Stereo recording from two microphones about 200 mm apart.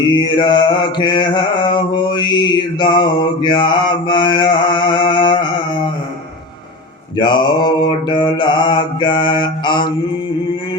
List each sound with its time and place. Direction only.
0.2 s mantra: 25° left (ahead or behind)
7.2 s mantra: 20° left (ahead or behind)